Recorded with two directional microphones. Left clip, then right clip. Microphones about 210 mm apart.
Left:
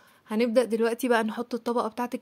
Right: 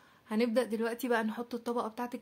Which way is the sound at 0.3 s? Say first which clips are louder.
Left 7 dB; 30° left (ahead or behind).